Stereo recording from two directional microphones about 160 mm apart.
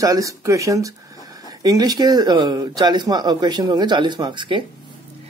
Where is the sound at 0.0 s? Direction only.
20° right (ahead or behind).